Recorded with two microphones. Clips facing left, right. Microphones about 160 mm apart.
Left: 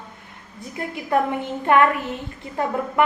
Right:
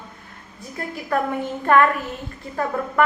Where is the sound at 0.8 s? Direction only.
20° left (ahead or behind).